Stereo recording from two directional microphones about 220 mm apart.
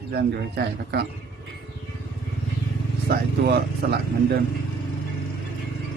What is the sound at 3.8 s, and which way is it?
Speech, 45° right (ahead or behind).